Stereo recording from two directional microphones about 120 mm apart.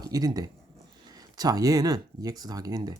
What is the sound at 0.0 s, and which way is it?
Speech, 35° right (ahead or behind).